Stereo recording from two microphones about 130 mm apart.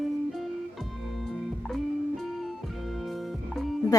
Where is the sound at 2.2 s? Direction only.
Centre (ahead or behind).